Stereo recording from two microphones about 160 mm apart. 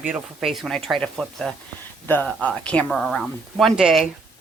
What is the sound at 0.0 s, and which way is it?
A woman's voice, 5° right (ahead or behind).